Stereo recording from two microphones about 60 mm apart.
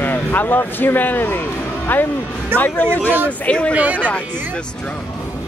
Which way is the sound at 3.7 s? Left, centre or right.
Right.